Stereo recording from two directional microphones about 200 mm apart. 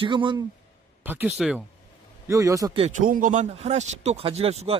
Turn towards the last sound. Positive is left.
turn(degrees=-30)  # may be behind; listen again after turning